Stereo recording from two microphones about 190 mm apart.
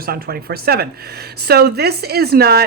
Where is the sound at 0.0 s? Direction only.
55° right (ahead or behind).